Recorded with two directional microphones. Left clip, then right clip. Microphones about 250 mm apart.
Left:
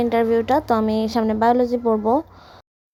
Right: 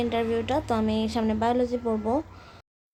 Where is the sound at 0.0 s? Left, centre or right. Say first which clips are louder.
Left 8 dB; left.